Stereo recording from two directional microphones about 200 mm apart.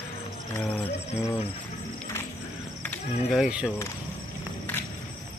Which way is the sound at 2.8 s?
5° left (ahead or behind).